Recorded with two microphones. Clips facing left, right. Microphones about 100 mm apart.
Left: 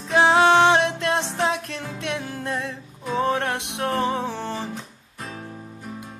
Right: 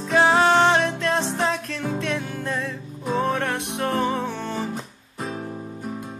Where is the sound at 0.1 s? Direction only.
15° left (ahead or behind).